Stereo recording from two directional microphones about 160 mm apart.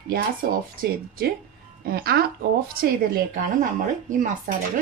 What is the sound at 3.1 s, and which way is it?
Speech, 60° right (ahead or behind).